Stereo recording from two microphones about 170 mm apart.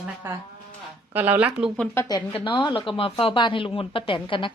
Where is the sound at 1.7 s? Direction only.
5° left (ahead or behind).